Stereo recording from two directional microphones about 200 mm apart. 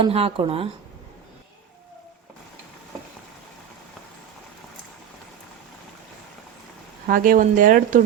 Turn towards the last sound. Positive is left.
turn(degrees=-45)  # may be behind; listen again after turning